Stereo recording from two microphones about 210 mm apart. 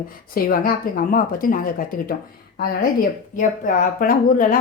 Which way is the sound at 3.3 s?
40° left (ahead or behind).